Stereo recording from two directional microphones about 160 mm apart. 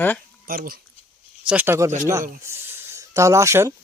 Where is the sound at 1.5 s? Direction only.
10° right (ahead or behind).